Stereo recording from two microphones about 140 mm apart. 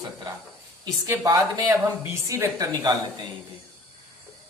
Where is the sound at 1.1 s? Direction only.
25° right (ahead or behind).